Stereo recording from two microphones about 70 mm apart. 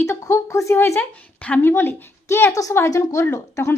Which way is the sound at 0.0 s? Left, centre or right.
Left.